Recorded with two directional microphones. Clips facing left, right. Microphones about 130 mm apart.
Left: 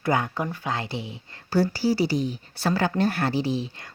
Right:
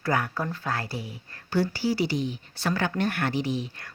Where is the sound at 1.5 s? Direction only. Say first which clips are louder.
Left 3 dB; 40° left (ahead or behind).